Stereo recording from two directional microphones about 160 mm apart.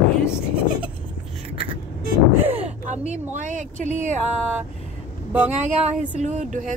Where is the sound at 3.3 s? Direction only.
50° right (ahead or behind).